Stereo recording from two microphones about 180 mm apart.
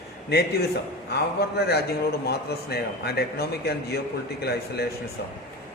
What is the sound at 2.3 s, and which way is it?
A man's voice, 65° left (ahead or behind).